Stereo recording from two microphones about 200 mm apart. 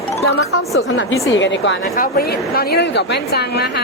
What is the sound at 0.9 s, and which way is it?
Speech, 70° left (ahead or behind).